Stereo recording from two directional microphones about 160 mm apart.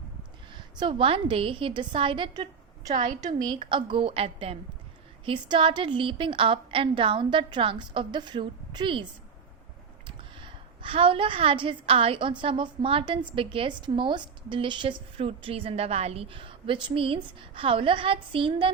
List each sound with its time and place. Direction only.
0.5 s a woman's voice: 30° right (ahead or behind)
10.1 s a woman's voice: 35° right (ahead or behind)